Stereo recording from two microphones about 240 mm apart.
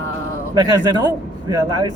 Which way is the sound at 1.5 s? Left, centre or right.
Centre.